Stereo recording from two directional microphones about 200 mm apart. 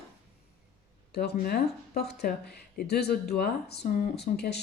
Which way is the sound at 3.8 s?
40° left (ahead or behind).